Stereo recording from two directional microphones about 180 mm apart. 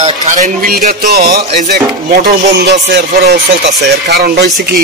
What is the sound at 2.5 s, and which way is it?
Speech, 70° right (ahead or behind).